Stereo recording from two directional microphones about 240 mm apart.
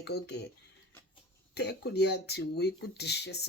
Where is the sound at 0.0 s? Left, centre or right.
Left.